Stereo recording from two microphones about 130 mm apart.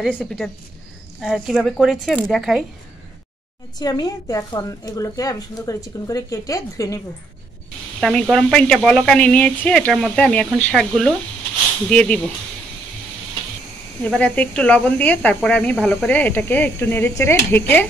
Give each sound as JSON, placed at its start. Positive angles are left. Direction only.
{"t": 0.2, "sound": "speech", "side_deg": 5}
{"t": 3.7, "sound": "a woman's voice", "side_deg": 30}
{"t": 8.0, "sound": "speech", "side_deg": 5}
{"t": 14.0, "sound": "speech", "side_deg": 10}
{"t": 16.1, "sound": "speech", "side_deg": 15}